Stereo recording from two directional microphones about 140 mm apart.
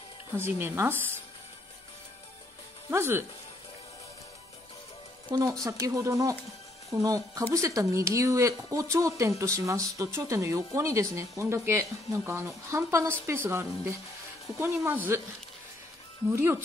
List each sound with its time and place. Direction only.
0.4 s a woman's voice: 15° right (ahead or behind)
2.9 s a woman's voice: 15° right (ahead or behind)
5.3 s a woman's voice: 25° right (ahead or behind)
16.3 s a woman's voice: 15° right (ahead or behind)